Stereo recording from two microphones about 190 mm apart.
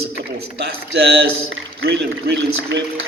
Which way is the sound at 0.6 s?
60° right (ahead or behind).